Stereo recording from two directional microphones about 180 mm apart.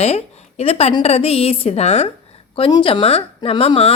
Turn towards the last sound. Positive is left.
turn(degrees=35)  # may be behind; listen again after turning